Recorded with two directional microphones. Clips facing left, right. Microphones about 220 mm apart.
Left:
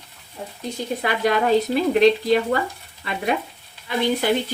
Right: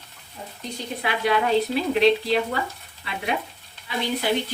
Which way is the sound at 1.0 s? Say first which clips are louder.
Left 2 dB; 45° left (ahead or behind).